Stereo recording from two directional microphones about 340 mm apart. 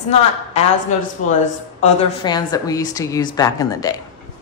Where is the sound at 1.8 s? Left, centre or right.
Centre.